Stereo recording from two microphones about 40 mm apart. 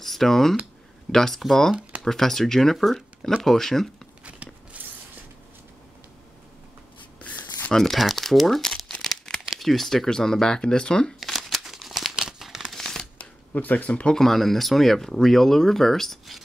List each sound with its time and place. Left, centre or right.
0.0 s speech: centre
1.8 s a sound: right
2.0 s speech: centre
4.2 s biting: right
4.7 s zipper: right
7.2 s writing: left
7.7 s speech: centre
11.3 s a sound: centre
11.7 s crumpling: centre
12.7 s a sound: centre
13.2 s speech: left
14.1 s speech: centre